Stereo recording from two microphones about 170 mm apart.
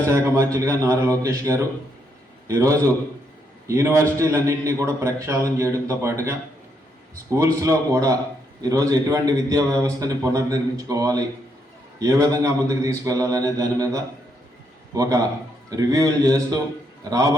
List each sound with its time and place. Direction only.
0.1 s a man's voice: 15° right (ahead or behind)